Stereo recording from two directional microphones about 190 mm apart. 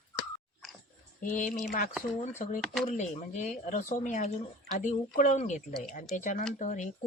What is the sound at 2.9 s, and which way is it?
Speech, 40° left (ahead or behind).